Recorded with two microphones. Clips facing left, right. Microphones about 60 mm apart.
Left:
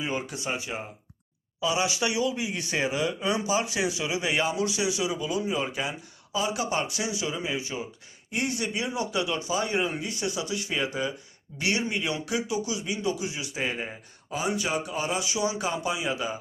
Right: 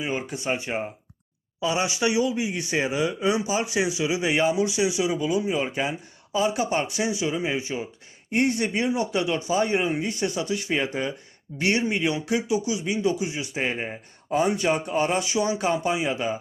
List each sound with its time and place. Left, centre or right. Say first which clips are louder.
0.0 s speech: right 2 dB; right
0.4 s speech: right 5 dB; right
14.3 s speech: right 6 dB; right